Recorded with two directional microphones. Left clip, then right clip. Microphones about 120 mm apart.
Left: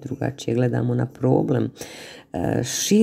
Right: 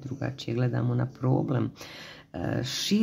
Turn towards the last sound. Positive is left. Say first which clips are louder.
# left 8 dB
turn(degrees=45)  # may be behind; listen again after turning